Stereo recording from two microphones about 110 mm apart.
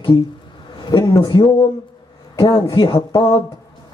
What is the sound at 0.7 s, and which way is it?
A man's voice, 40° left (ahead or behind).